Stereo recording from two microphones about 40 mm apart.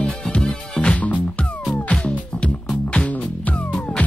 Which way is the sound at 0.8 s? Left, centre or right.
Left.